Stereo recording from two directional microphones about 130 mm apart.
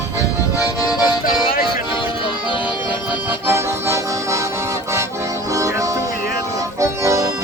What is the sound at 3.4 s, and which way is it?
Music, 20° right (ahead or behind).